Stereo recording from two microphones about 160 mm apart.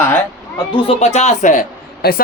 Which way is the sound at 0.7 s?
40° left (ahead or behind).